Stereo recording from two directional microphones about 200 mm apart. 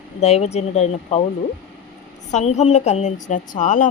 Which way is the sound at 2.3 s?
35° left (ahead or behind).